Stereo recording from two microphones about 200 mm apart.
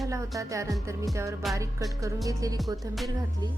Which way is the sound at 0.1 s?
15° right (ahead or behind).